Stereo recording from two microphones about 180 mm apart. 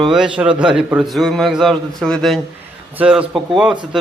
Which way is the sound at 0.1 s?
5° right (ahead or behind).